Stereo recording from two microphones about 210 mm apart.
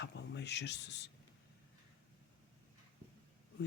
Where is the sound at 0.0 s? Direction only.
55° left (ahead or behind).